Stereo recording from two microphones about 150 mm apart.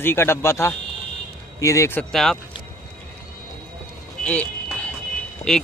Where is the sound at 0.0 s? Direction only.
15° left (ahead or behind).